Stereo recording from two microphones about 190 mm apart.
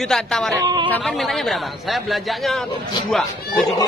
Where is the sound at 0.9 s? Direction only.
Centre (ahead or behind).